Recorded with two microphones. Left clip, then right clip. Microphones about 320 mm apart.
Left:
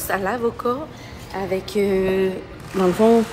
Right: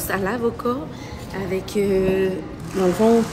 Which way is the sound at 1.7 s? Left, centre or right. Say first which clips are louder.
Even; centre.